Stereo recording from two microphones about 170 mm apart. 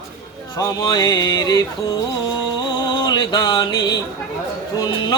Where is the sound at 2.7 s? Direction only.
25° left (ahead or behind).